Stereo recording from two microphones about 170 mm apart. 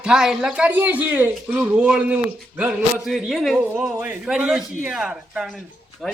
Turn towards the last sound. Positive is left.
turn(degrees=0)  # may be behind; listen again after turning